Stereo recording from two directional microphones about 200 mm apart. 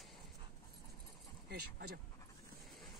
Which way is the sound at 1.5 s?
55° right (ahead or behind).